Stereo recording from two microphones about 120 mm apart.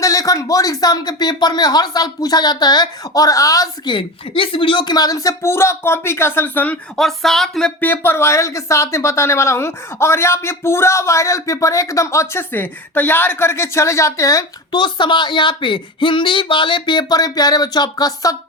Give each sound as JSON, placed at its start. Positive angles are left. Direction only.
{"t": 0.0, "sound": "speech", "side_deg": 30}
{"t": 3.9, "sound": "speech", "side_deg": 45}
{"t": 6.9, "sound": "speech", "side_deg": 0}
{"t": 7.8, "sound": "speech", "side_deg": 15}
{"t": 14.8, "sound": "speech", "side_deg": 40}